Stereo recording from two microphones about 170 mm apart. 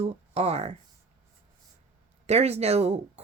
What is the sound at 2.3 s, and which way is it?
Speech, 40° right (ahead or behind).